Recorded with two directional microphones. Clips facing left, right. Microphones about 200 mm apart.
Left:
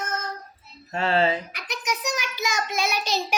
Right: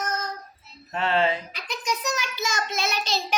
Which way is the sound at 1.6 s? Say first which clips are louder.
Even; 15° left (ahead or behind).